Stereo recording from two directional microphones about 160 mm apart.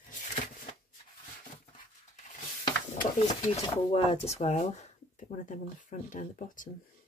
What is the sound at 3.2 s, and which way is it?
Speech, 40° left (ahead or behind).